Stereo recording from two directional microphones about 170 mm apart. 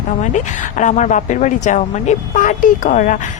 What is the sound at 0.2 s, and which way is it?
Speech, 45° left (ahead or behind).